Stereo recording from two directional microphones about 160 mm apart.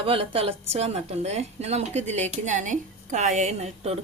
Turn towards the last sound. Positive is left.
turn(degrees=-40)  # may be behind; listen again after turning